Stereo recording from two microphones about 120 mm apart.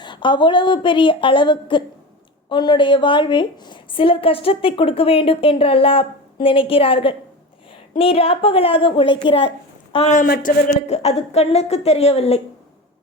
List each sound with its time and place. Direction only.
0.0 s a woman's voice: 40° left (ahead or behind)
10.1 s speech: 90° left; by 12.4 s 55° left (ahead or behind)